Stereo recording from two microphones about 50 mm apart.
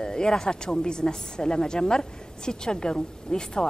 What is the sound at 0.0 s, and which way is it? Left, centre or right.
Speech, centre.